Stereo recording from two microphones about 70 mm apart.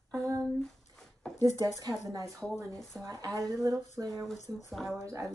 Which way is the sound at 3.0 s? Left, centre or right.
Right.